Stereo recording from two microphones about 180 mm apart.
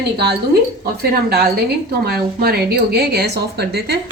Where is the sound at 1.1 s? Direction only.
60° right (ahead or behind).